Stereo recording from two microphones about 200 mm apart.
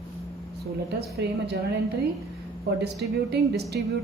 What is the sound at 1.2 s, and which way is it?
Speech, 55° right (ahead or behind).